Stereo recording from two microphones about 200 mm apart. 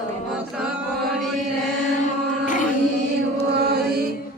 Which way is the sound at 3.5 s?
55° right (ahead or behind).